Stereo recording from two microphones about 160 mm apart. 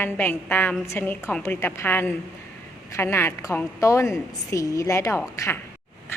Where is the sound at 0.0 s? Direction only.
10° left (ahead or behind).